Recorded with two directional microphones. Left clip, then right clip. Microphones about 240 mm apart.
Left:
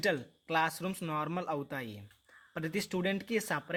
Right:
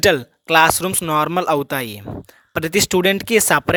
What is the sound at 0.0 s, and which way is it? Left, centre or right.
Speech, right.